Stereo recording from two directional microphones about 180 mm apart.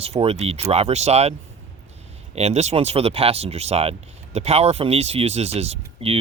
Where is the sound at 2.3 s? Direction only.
35° right (ahead or behind).